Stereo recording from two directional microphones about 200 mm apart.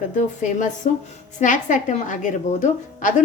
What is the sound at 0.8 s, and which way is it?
A woman's voice, 40° left (ahead or behind).